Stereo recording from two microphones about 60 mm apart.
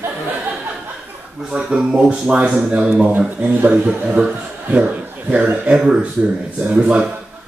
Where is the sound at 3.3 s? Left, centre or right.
Right.